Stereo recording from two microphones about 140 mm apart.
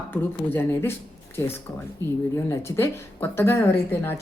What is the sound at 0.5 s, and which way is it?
A woman's voice, 15° left (ahead or behind).